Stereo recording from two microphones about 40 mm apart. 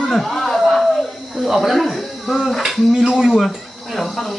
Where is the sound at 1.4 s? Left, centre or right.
Centre.